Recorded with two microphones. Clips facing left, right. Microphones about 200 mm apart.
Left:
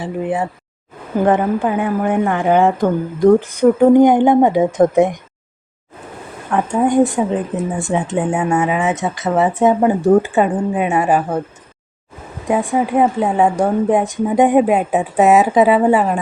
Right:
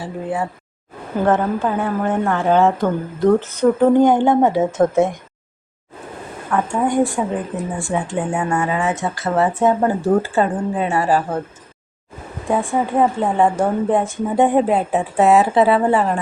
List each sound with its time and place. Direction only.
0.0 s a woman's voice: 20° left (ahead or behind)
6.5 s speech: 20° left (ahead or behind)
12.5 s a woman's voice: 15° left (ahead or behind)